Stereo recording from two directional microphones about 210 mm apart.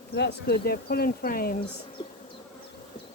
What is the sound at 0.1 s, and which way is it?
Speech, 50° left (ahead or behind).